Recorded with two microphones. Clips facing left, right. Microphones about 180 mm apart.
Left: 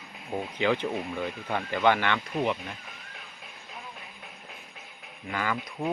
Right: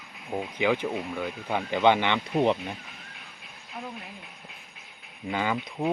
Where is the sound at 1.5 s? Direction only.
20° right (ahead or behind).